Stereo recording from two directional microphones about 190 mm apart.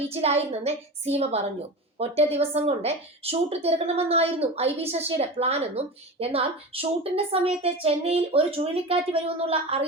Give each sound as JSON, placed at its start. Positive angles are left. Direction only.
{"t": 0.0, "sound": "a woman's voice", "side_deg": -30}